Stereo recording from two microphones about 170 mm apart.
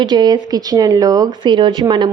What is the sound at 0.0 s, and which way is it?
Speech, 25° right (ahead or behind).